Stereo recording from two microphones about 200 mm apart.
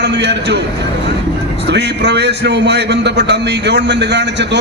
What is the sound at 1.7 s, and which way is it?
A man's voice, 60° right (ahead or behind).